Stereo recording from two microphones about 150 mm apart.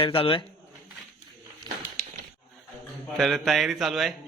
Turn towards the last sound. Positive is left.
turn(degrees=0)  # may be behind; listen again after turning